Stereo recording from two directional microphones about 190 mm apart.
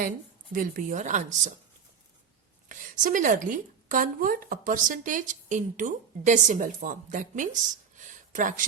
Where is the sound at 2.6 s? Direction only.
45° right (ahead or behind).